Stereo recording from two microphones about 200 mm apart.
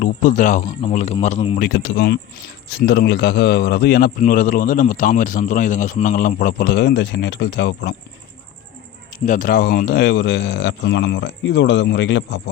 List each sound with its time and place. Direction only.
0.0 s speech: 40° left (ahead or behind)
1.5 s speech: 50° left (ahead or behind)
4.2 s a man's voice: 45° left (ahead or behind)
9.1 s speech: 40° left (ahead or behind); by 12.4 s 60° left (ahead or behind)